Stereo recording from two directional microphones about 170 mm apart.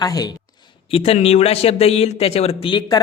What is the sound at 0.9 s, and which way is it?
A man's voice, 35° left (ahead or behind).